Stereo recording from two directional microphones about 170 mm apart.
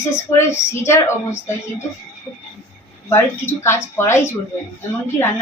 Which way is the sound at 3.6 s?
15° left (ahead or behind).